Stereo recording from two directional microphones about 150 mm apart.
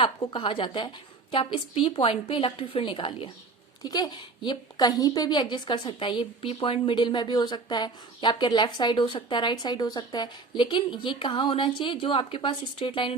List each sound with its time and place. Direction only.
0.0 s a woman's voice: 35° left (ahead or behind)